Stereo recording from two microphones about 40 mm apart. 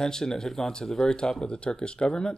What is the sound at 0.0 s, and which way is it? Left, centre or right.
Speech, centre.